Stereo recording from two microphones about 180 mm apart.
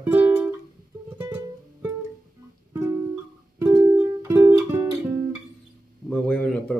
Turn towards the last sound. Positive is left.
turn(degrees=5)  # may be behind; listen again after turning